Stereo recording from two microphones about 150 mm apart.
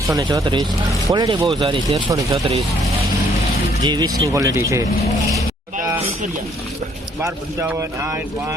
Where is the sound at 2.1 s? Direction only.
20° right (ahead or behind).